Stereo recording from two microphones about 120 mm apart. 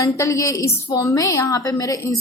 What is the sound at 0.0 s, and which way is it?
A woman's voice, 25° left (ahead or behind).